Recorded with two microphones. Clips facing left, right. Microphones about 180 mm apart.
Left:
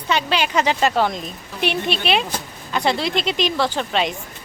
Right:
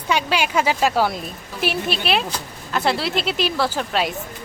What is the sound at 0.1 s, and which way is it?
A woman's voice, 10° right (ahead or behind).